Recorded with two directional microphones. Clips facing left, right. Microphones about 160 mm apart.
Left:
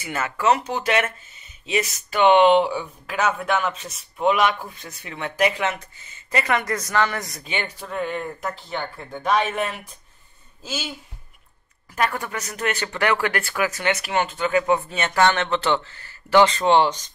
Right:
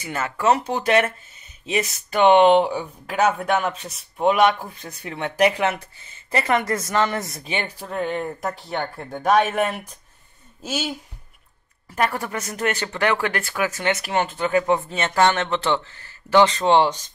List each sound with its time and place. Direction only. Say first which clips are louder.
0.0 s speech: right 1 dB; 30° right (ahead or behind)
8.6 s speech: right 3 dB; 55° right (ahead or behind)
9.1 s speech: right 3 dB; 45° right (ahead or behind)
11.9 s speech: right 1 dB; 35° right (ahead or behind)